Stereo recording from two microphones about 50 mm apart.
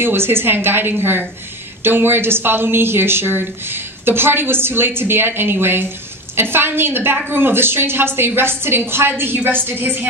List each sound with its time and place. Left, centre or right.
0.0 s a woman's voice: right